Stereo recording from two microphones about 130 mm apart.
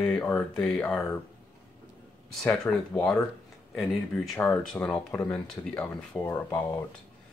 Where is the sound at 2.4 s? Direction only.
5° left (ahead or behind).